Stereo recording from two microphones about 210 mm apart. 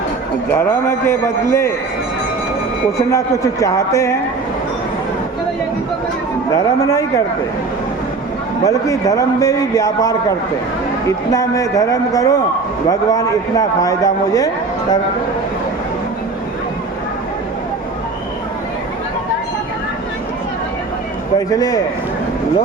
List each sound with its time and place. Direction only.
0.5 s a man's voice: 10° left (ahead or behind)
3.1 s a man's voice: 15° left (ahead or behind)
6.5 s a man's voice: 15° left (ahead or behind)
8.6 s a man's voice: 15° left (ahead or behind)
21.3 s a man's voice: 15° left (ahead or behind)